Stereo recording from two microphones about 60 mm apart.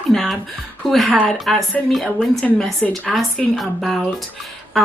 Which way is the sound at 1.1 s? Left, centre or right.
Centre.